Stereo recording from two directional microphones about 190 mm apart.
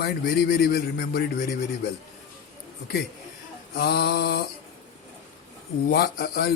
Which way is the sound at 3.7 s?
55° left (ahead or behind).